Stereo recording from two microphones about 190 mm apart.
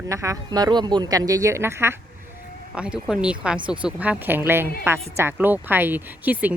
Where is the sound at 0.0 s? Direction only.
15° right (ahead or behind).